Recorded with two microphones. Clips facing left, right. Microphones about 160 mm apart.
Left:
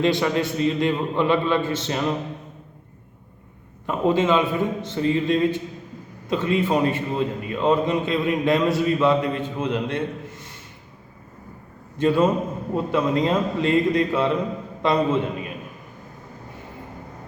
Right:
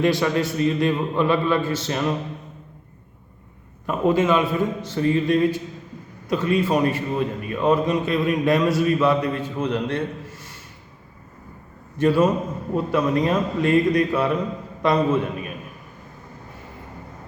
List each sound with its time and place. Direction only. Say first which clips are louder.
0.0 s a man's voice: right 1 dB; 25° left (ahead or behind)
3.8 s a man's voice: right 1 dB; 20° left (ahead or behind)
11.9 s a man's voice: right 1 dB; 20° left (ahead or behind)